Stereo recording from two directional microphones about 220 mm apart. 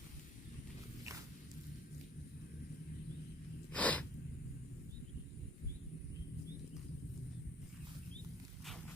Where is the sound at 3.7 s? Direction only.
5° left (ahead or behind).